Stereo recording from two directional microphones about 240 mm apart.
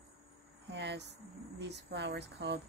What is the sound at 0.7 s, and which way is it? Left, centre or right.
Cricket, right.